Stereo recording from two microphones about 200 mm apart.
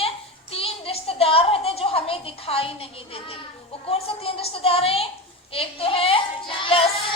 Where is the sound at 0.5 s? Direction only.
30° left (ahead or behind).